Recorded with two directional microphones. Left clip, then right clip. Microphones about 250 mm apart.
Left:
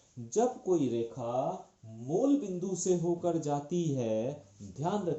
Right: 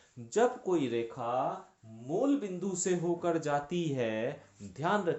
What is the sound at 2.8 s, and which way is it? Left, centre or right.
Speech, right.